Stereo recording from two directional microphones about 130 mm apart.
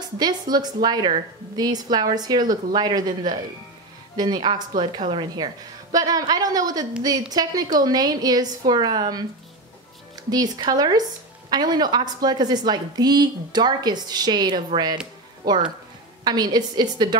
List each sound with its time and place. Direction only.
0.2 s a woman's voice: 30° right (ahead or behind)
4.2 s a woman's voice: 35° right (ahead or behind)